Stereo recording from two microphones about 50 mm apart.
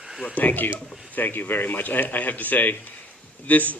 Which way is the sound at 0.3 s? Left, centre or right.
Left.